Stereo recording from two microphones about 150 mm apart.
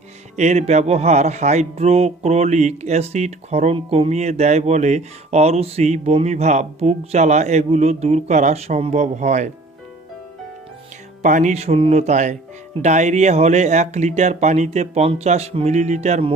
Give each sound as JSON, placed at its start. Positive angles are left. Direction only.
{"t": 0.3, "sound": "speech", "side_deg": -50}
{"t": 11.2, "sound": "speech", "side_deg": -55}